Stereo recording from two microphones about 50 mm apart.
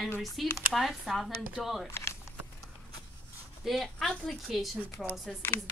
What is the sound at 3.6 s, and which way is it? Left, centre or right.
Speech, centre.